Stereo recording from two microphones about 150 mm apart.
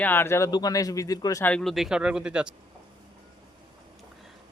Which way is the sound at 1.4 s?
5° left (ahead or behind).